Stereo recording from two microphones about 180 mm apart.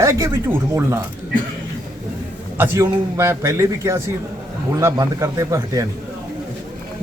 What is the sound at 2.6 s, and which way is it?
A man's voice, 15° right (ahead or behind).